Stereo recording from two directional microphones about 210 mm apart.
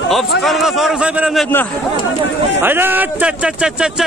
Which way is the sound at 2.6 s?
10° right (ahead or behind).